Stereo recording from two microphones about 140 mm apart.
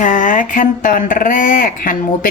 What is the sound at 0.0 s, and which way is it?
Speech, 65° left (ahead or behind).